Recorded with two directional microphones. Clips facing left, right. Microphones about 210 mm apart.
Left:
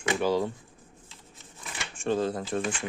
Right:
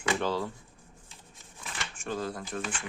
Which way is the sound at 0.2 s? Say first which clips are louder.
Left 5 dB; 10° left (ahead or behind).